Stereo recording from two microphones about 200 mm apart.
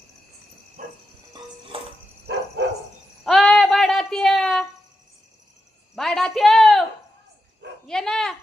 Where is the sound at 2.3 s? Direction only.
60° right (ahead or behind).